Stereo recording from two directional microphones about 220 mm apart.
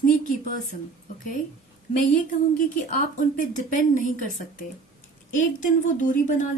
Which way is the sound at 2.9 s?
35° left (ahead or behind).